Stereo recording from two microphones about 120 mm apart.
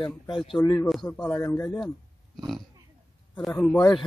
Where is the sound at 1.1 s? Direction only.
15° left (ahead or behind).